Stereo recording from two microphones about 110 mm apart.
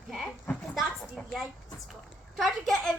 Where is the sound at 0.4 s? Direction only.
Centre (ahead or behind).